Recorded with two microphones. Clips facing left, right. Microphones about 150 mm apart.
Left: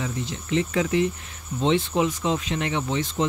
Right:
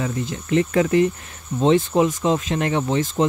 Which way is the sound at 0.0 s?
50° right (ahead or behind).